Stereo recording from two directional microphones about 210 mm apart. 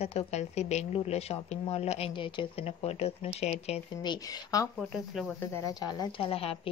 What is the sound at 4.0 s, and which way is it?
Speech, 20° left (ahead or behind).